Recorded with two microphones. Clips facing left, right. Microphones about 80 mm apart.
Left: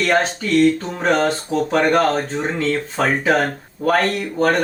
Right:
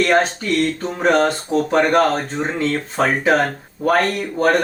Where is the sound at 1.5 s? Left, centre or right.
Centre.